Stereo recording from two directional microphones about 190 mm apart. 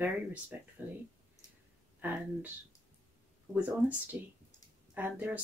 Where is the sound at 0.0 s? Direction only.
10° right (ahead or behind).